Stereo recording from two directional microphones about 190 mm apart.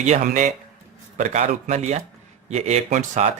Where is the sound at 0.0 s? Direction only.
40° right (ahead or behind).